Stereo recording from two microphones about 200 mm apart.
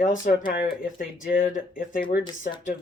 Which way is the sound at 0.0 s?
40° left (ahead or behind).